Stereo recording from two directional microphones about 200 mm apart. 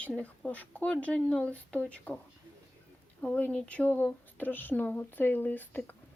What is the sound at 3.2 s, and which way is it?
A woman's voice, 5° left (ahead or behind).